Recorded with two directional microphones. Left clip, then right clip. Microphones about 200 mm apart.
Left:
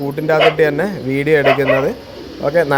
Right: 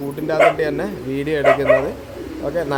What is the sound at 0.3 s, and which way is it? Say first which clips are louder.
Speech: left 3 dB; 30° left (ahead or behind).